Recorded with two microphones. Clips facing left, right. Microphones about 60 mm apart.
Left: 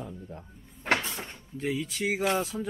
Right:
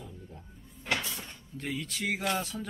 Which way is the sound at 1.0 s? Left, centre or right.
Left.